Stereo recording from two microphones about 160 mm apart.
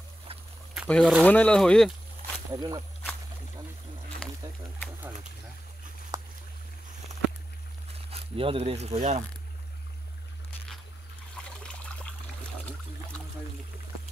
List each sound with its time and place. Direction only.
0.8 s speech: 5° left (ahead or behind)
2.5 s speech: 25° right (ahead or behind)
7.9 s speech: 35° right (ahead or behind)
11.4 s trickle: 5° left (ahead or behind)